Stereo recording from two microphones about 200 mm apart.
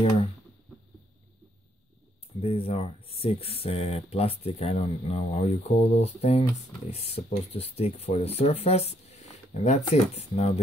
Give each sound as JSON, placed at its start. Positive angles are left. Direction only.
{"t": 2.4, "sound": "speech", "side_deg": 30}